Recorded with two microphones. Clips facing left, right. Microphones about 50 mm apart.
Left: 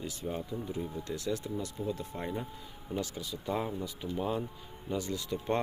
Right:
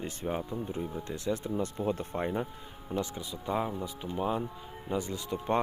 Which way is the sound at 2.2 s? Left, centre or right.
Right.